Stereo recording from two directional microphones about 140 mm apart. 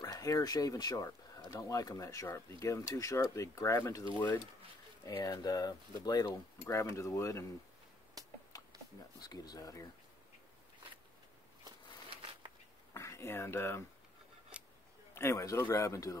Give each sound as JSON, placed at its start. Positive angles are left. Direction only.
{"t": 0.0, "sound": "speech", "side_deg": 25}
{"t": 8.5, "sound": "a sound", "side_deg": 25}
{"t": 9.2, "sound": "speech", "side_deg": 30}
{"t": 12.9, "sound": "speech", "side_deg": 20}
{"t": 15.1, "sound": "speech", "side_deg": 20}